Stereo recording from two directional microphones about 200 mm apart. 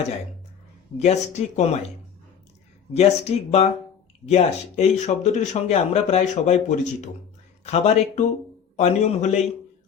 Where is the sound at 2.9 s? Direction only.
30° left (ahead or behind).